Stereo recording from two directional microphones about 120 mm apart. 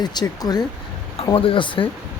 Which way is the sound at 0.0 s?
35° left (ahead or behind).